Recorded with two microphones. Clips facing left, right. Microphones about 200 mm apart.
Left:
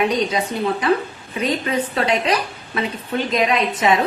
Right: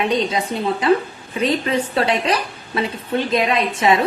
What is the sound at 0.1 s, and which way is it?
Speech, 25° right (ahead or behind).